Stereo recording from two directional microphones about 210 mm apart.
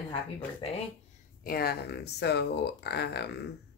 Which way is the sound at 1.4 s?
45° left (ahead or behind).